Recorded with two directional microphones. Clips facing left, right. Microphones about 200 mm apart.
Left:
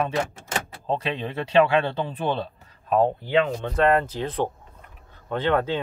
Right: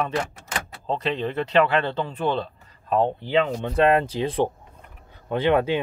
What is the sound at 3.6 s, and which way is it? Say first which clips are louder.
Speech: right 1 dB; 15° right (ahead or behind).